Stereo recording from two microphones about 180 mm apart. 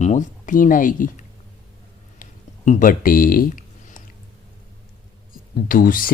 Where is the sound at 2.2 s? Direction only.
45° left (ahead or behind).